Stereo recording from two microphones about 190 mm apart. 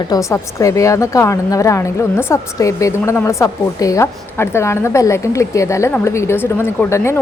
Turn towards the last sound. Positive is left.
turn(degrees=15)  # may be behind; listen again after turning